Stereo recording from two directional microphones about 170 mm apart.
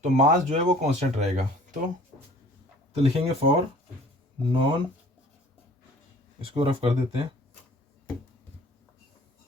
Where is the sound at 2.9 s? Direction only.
35° right (ahead or behind).